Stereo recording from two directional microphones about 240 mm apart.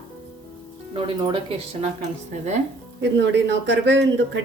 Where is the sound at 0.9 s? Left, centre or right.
Right.